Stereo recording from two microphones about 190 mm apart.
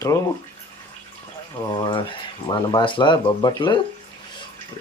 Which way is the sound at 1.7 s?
25° left (ahead or behind).